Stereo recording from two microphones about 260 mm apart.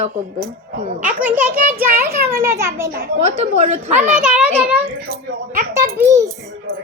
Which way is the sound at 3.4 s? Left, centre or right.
Right.